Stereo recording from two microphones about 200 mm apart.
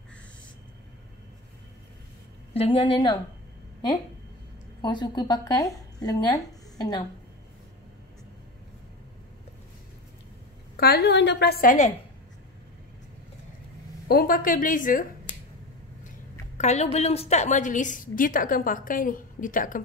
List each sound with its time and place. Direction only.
2.5 s speech: 30° left (ahead or behind)
4.8 s speech: 20° left (ahead or behind)
10.8 s a woman's voice: 50° left (ahead or behind)
14.0 s a woman's voice: 50° left (ahead or behind)
16.5 s a woman's voice: 35° left (ahead or behind)